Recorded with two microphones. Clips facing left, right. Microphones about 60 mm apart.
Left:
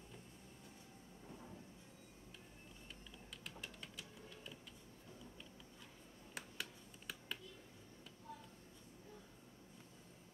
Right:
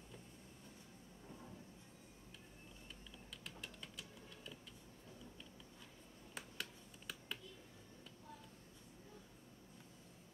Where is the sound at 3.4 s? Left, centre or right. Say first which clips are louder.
Left 1 dB; centre.